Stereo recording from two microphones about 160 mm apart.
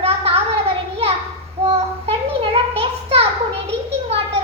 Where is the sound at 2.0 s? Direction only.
35° right (ahead or behind).